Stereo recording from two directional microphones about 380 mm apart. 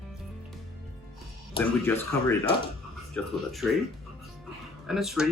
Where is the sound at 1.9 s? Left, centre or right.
Centre.